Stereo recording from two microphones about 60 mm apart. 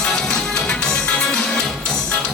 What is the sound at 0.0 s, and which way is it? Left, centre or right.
Music, centre.